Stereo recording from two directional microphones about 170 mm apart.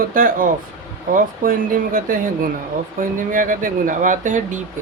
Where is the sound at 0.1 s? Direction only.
55° right (ahead or behind).